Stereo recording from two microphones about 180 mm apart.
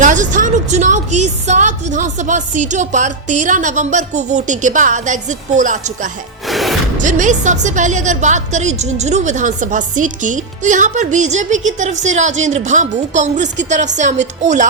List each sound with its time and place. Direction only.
0.0 s a woman's voice: 45° right (ahead or behind)
6.5 s music: centre (ahead or behind)
7.0 s a woman's voice: 45° right (ahead or behind)